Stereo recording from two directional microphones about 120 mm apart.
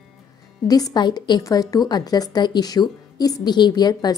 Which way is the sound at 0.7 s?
30° left (ahead or behind).